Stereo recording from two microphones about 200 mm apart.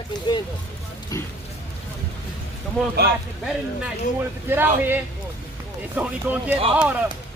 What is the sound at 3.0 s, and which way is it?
Speech, 50° right (ahead or behind).